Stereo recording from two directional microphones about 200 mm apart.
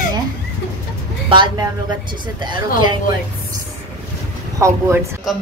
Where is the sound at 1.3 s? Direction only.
25° right (ahead or behind).